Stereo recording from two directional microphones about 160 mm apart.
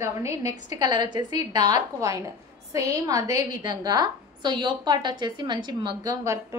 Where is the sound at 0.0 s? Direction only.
15° right (ahead or behind).